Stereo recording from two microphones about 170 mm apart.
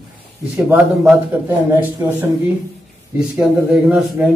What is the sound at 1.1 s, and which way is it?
A man's voice, 10° right (ahead or behind).